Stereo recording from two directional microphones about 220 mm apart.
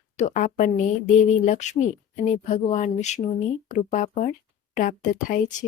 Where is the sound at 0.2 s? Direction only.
35° left (ahead or behind).